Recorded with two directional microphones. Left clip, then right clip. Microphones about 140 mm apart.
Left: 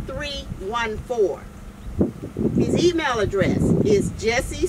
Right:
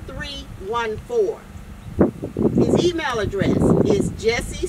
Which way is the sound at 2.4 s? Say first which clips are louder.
Right 4 dB; 45° right (ahead or behind).